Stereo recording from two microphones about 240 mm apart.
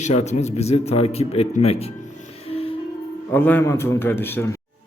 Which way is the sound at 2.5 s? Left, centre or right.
Left.